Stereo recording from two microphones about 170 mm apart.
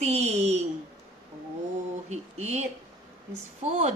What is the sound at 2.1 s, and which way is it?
Speech, 40° right (ahead or behind).